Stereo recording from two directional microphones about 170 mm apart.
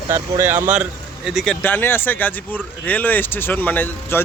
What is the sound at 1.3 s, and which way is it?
Speech, centre (ahead or behind).